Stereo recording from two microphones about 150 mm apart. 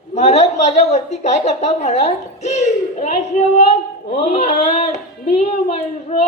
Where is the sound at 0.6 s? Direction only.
50° left (ahead or behind).